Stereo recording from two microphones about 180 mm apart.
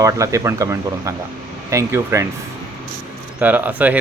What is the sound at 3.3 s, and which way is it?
Speech, 10° right (ahead or behind).